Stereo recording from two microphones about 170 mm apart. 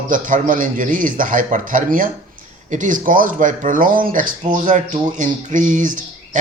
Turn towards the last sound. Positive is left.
turn(degrees=-50)  # may be behind; listen again after turning